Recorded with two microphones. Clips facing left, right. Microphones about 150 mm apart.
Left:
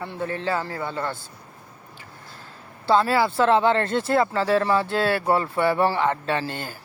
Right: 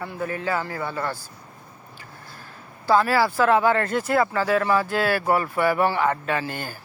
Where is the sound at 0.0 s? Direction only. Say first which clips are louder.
Even; 25° left (ahead or behind).